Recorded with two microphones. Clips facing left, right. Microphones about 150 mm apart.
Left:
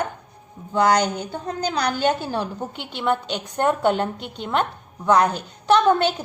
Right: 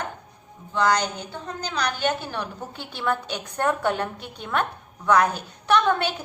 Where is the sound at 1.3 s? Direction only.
35° left (ahead or behind).